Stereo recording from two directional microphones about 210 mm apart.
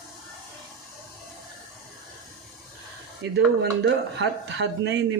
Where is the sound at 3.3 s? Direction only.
55° right (ahead or behind).